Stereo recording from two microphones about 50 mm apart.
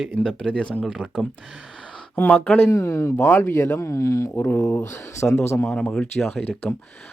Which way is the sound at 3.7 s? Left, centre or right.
Left.